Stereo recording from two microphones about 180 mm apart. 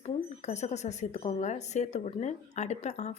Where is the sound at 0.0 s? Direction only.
40° left (ahead or behind).